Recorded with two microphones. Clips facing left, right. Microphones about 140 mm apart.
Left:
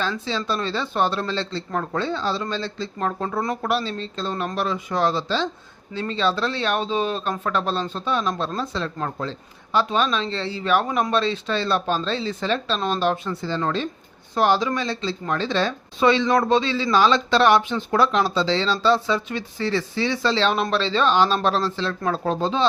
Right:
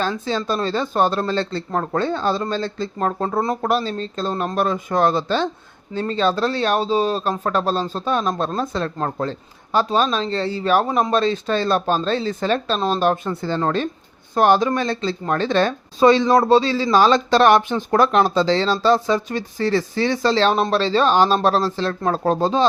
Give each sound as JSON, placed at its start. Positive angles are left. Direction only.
{"t": 0.3, "sound": "speech", "side_deg": -45}
{"t": 13.6, "sound": "speech", "side_deg": -40}
{"t": 16.0, "sound": "speech", "side_deg": -40}